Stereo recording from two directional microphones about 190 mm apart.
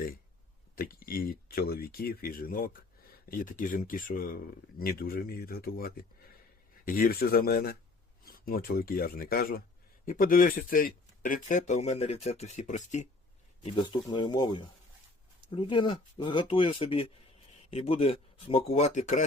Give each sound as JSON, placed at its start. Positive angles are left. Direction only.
{"t": 0.8, "sound": "speech", "side_deg": 50}
{"t": 13.7, "sound": "speech", "side_deg": 25}